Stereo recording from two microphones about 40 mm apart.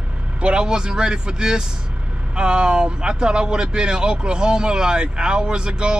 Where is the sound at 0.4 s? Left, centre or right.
Right.